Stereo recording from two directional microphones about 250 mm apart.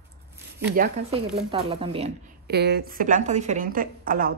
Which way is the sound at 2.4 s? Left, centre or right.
Right.